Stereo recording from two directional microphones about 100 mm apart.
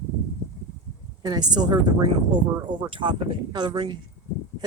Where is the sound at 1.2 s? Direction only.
45° right (ahead or behind).